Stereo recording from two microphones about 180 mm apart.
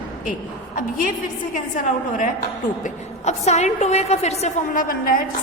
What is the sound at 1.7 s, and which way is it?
A woman's voice, 45° left (ahead or behind).